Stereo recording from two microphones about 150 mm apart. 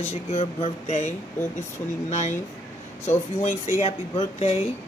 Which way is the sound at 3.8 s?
45° left (ahead or behind).